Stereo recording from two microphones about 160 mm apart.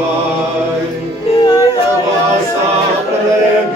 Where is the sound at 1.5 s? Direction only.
25° left (ahead or behind).